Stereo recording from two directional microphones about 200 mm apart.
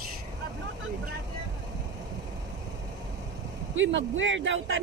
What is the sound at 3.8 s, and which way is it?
Speech, 70° right (ahead or behind).